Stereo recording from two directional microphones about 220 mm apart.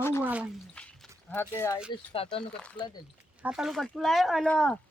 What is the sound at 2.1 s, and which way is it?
Speech, 25° left (ahead or behind).